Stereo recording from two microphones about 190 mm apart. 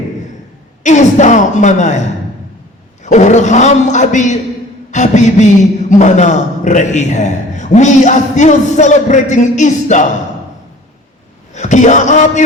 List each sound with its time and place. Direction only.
0.8 s a man's voice: 40° left (ahead or behind)
3.0 s a man's voice: 40° left (ahead or behind)
11.5 s a man's voice: 40° left (ahead or behind)